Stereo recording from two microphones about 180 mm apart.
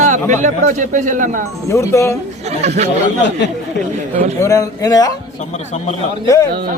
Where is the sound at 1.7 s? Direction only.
15° left (ahead or behind).